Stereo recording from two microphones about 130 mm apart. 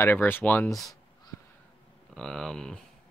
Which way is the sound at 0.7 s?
Centre (ahead or behind).